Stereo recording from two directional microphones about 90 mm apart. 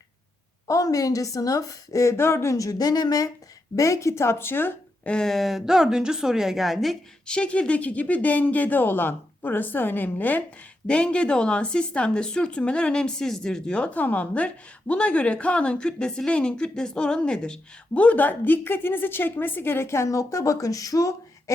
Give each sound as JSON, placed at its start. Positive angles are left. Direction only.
{"t": 0.7, "sound": "a woman's voice", "side_deg": 40}
{"t": 5.0, "sound": "a woman's voice", "side_deg": 5}
{"t": 7.3, "sound": "speech", "side_deg": 10}